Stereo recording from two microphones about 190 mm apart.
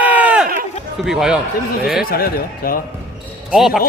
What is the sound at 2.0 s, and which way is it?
Speech, 50° left (ahead or behind).